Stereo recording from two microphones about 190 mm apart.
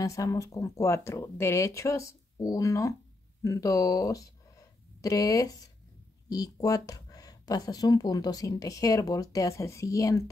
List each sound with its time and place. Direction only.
0.0 s speech: 15° left (ahead or behind)